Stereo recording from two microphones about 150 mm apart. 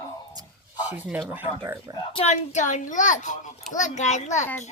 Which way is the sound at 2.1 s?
45° left (ahead or behind).